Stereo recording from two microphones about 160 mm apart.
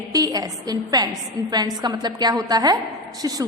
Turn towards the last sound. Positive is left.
turn(degrees=-20)  # may be behind; listen again after turning